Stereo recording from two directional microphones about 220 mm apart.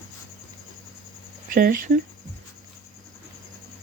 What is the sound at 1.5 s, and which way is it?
Speech, 40° right (ahead or behind).